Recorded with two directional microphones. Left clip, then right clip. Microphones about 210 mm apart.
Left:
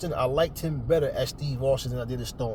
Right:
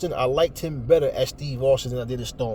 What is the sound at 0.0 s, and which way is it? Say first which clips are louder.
Speech: right 4 dB; 45° right (ahead or behind).